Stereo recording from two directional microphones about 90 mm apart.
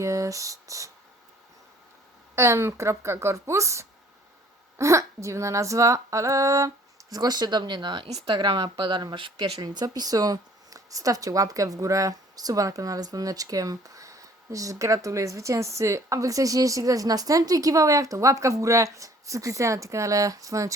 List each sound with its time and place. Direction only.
0.0 s speech: 35° right (ahead or behind)
2.3 s speech: 30° right (ahead or behind)
7.1 s speech: 50° right (ahead or behind)